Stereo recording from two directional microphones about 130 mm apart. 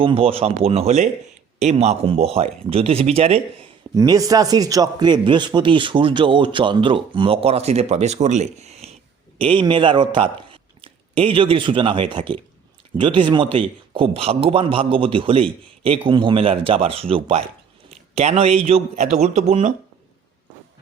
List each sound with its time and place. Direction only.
0.0 s a man's voice: 45° right (ahead or behind)
3.9 s a man's voice: 30° right (ahead or behind); by 8.9 s 55° right (ahead or behind)
9.4 s a man's voice: 40° right (ahead or behind); by 19.7 s 60° right (ahead or behind)